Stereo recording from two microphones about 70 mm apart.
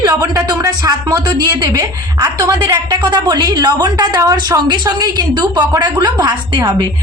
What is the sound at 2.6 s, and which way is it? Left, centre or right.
A woman's voice, right.